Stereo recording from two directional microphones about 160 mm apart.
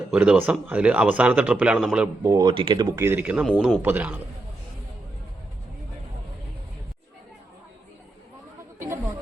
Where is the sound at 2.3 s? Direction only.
25° right (ahead or behind).